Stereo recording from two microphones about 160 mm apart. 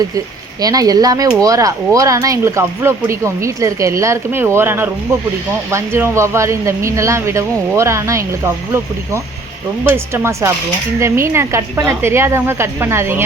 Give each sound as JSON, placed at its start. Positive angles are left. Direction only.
{"t": 0.6, "sound": "speech", "side_deg": -25}